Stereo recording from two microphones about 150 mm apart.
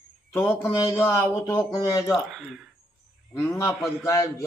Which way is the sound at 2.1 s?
Centre (ahead or behind).